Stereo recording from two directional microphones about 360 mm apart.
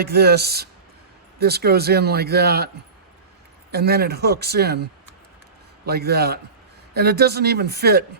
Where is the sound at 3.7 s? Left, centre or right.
Right.